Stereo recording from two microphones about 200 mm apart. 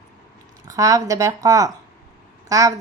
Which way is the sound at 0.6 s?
15° right (ahead or behind).